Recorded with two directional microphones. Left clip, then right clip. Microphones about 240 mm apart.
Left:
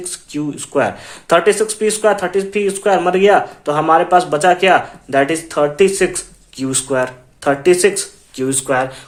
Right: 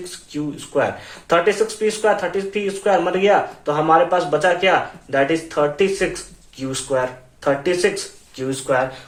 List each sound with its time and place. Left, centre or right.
0.3 s speech: left